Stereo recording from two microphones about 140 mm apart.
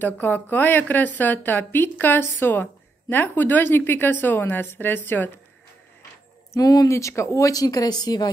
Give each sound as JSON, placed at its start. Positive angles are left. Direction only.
{"t": 0.0, "sound": "speech", "side_deg": 15}
{"t": 6.5, "sound": "speech", "side_deg": 25}